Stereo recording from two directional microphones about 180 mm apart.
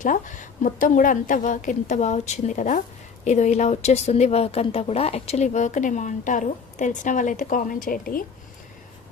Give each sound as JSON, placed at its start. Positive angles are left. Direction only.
{"t": 0.0, "sound": "a woman's voice", "side_deg": 45}